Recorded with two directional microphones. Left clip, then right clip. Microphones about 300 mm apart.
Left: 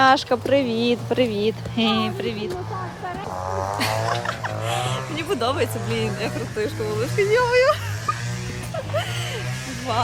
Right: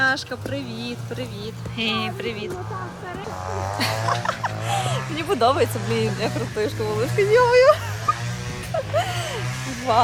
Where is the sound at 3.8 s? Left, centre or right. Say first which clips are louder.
Right 3 dB; centre.